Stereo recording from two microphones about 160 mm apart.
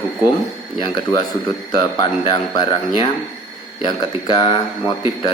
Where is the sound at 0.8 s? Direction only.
25° left (ahead or behind).